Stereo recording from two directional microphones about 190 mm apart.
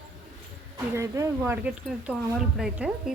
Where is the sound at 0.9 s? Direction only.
15° right (ahead or behind).